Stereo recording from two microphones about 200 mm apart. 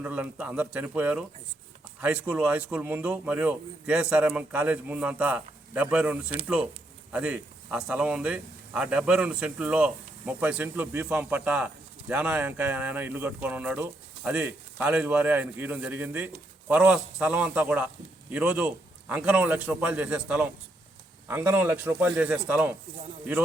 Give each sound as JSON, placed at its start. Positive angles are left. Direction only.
{"t": 0.0, "sound": "a man's voice", "side_deg": -5}